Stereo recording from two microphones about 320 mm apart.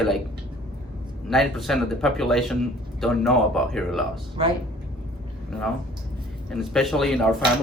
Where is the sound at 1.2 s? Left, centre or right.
Centre.